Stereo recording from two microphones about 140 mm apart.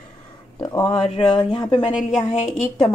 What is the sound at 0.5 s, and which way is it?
Speech, 25° left (ahead or behind).